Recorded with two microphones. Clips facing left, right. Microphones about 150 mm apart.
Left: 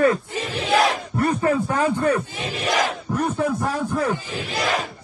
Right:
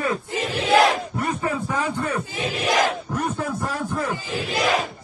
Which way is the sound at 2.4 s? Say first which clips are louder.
Right 1 dB; centre (ahead or behind).